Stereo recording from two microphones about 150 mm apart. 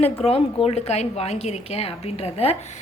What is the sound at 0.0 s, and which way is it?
A woman's voice, 40° left (ahead or behind).